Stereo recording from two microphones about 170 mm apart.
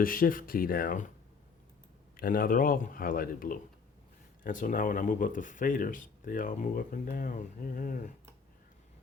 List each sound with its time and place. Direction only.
0.0 s speech: 55° left (ahead or behind)
2.1 s speech: 60° left (ahead or behind)